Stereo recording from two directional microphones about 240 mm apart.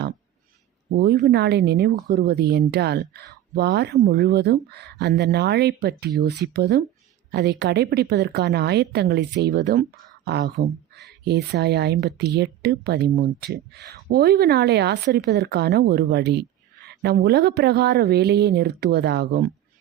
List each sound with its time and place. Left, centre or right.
0.9 s speech: right
10.6 s speech: right
11.3 s speech: right